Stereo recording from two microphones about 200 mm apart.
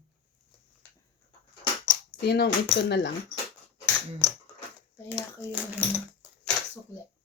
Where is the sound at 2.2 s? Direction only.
55° left (ahead or behind).